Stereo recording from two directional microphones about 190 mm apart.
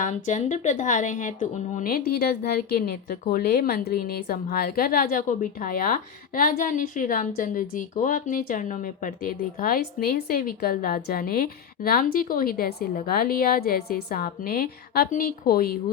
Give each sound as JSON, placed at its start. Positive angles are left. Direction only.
{"t": 0.0, "sound": "a woman's voice", "side_deg": 40}